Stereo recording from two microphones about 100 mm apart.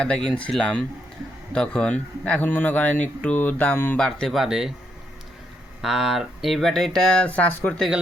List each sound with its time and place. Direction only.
0.0 s speech: 10° left (ahead or behind)
3.9 s speech: 5° left (ahead or behind)
5.8 s speech: 5° right (ahead or behind); by 7.8 s 15° left (ahead or behind)